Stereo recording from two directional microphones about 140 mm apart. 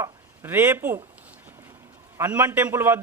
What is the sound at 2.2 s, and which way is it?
Speech, 15° right (ahead or behind).